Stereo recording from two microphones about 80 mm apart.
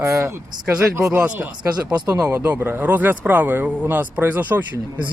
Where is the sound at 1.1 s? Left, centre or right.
Centre.